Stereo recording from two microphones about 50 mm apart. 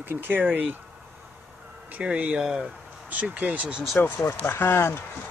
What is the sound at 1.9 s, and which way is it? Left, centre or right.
Speech, right.